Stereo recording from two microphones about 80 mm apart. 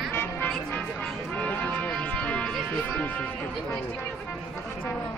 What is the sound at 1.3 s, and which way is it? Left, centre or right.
Speech, centre.